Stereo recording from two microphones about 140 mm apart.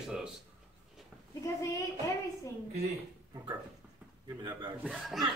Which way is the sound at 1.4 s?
20° left (ahead or behind).